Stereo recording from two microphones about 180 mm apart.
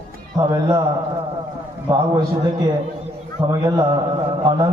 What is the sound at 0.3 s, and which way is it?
Speech, 20° right (ahead or behind).